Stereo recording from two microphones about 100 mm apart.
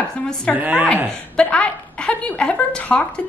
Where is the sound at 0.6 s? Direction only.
15° right (ahead or behind).